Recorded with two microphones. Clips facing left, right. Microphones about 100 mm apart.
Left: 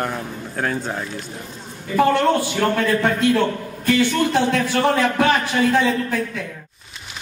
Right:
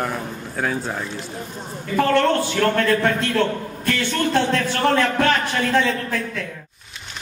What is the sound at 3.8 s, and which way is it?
A man's voice, 15° left (ahead or behind).